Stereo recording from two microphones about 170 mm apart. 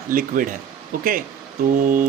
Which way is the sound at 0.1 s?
55° right (ahead or behind).